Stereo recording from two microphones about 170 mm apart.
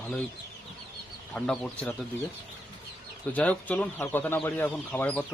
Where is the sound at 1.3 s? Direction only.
5° left (ahead or behind).